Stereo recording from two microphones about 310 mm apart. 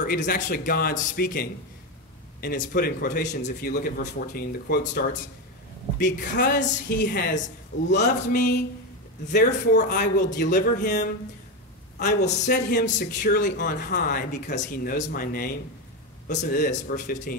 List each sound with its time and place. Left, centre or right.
0.0 s a man's voice: left